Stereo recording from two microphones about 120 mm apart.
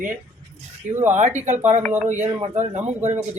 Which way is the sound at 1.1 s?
90° right.